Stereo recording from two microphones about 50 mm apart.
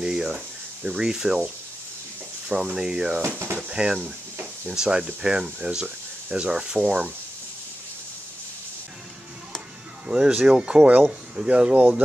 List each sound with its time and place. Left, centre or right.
0.0 s a sound: centre
0.9 s speech: centre
10.0 s speech: right